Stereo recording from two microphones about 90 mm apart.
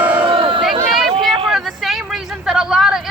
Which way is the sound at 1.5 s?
Centre (ahead or behind).